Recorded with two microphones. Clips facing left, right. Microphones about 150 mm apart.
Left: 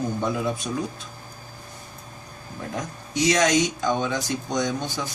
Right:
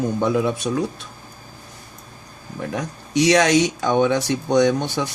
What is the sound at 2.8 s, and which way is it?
A man's voice, 75° right (ahead or behind).